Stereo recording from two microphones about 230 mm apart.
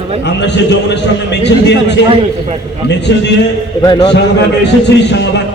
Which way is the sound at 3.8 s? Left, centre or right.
Centre.